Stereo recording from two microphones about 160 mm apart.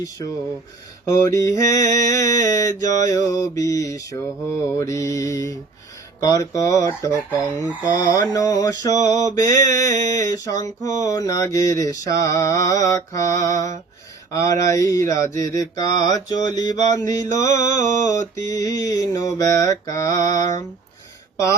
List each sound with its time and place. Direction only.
0.0 s mantra: 20° left (ahead or behind)